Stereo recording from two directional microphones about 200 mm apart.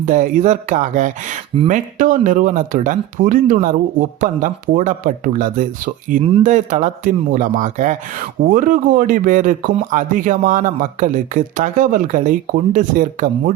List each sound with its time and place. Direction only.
0.0 s speech: 40° right (ahead or behind)